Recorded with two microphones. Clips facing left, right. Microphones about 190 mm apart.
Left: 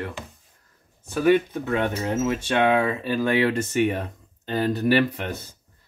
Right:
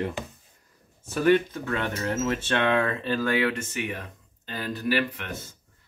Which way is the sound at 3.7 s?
40° left (ahead or behind).